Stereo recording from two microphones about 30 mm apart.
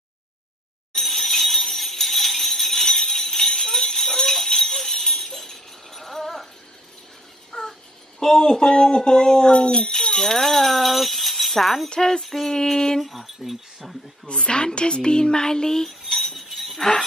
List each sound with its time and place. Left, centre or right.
0.9 s jingle bell: centre
4.0 s music: centre
4.5 s jingle bell: centre
7.5 s a sound: left
8.4 s a woman's voice: left
9.9 s speech: centre
10.3 s speech: centre
11.9 s a woman's voice: left
12.2 s a sound: centre
13.0 s speech: centre
14.2 s a woman's voice: left
16.1 s music: centre
16.3 s jingle bell: centre